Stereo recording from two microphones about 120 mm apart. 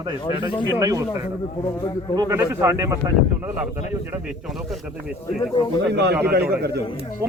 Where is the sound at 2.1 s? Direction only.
30° right (ahead or behind).